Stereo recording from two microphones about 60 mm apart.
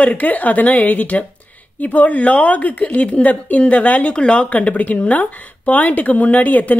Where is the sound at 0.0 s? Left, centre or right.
Left.